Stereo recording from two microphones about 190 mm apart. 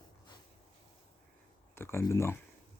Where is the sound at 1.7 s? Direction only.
15° left (ahead or behind).